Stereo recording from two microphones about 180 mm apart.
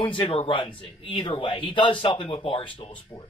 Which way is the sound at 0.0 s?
30° left (ahead or behind).